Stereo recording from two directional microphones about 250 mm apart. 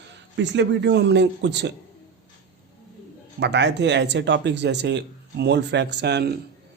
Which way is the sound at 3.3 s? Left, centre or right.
Right.